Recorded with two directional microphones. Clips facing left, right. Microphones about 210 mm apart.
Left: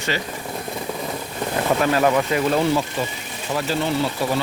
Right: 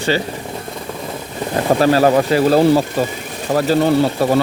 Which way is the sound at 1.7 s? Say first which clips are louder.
Right 6 dB; 35° right (ahead or behind).